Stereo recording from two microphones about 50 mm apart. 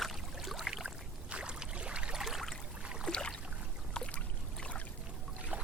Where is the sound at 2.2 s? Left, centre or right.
Centre.